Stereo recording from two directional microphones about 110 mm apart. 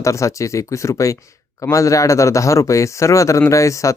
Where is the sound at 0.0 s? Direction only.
30° left (ahead or behind).